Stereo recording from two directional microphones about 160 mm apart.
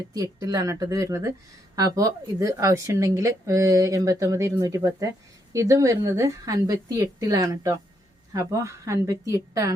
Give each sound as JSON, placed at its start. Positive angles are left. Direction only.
{"t": 0.1, "sound": "a woman's voice", "side_deg": -20}